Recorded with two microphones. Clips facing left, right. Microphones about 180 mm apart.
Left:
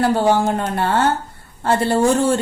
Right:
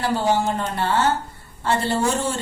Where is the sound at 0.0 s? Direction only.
55° left (ahead or behind).